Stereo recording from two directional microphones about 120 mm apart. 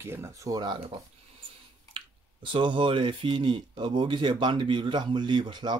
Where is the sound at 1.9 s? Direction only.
45° right (ahead or behind).